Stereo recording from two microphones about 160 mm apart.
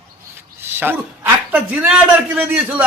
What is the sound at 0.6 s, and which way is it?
A man's voice, 15° right (ahead or behind).